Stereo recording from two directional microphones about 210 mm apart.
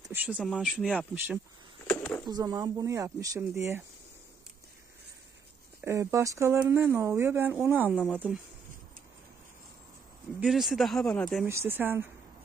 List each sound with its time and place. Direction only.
0.1 s speech: 5° right (ahead or behind)
1.9 s a sound: 10° left (ahead or behind)
2.2 s speech: 20° right (ahead or behind)
5.8 s speech: 15° right (ahead or behind)
10.4 s speech: centre (ahead or behind)
11.4 s speech: 10° right (ahead or behind)